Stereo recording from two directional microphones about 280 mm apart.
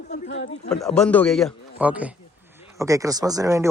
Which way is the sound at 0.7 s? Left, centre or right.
Centre.